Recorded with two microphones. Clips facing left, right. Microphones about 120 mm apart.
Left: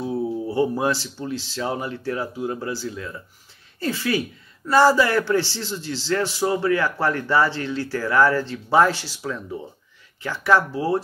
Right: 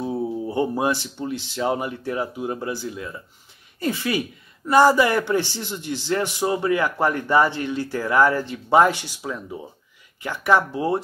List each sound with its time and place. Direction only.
0.1 s speech: 20° right (ahead or behind)